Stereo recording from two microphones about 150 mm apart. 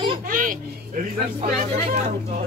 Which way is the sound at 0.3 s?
65° right (ahead or behind).